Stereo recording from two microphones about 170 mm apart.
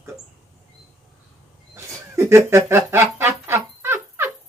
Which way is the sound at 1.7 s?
15° right (ahead or behind).